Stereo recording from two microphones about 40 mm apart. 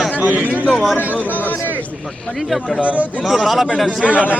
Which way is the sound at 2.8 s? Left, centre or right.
Right.